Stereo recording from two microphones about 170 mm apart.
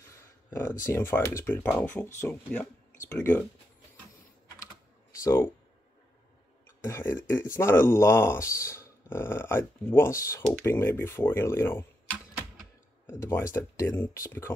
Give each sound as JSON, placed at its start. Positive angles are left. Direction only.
{"t": 0.5, "sound": "speech", "side_deg": 15}
{"t": 5.2, "sound": "speech", "side_deg": 20}
{"t": 6.8, "sound": "speech", "side_deg": 15}
{"t": 13.0, "sound": "speech", "side_deg": 15}